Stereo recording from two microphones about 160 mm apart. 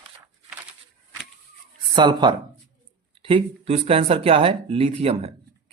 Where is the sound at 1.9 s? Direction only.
30° right (ahead or behind).